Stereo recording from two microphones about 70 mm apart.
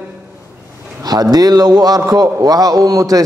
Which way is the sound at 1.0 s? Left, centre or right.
Right.